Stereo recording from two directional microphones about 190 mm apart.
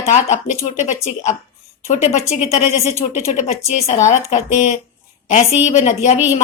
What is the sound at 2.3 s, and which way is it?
A woman's voice, 35° left (ahead or behind).